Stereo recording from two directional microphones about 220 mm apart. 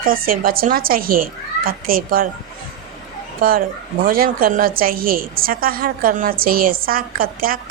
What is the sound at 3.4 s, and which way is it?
A woman's voice, 40° right (ahead or behind).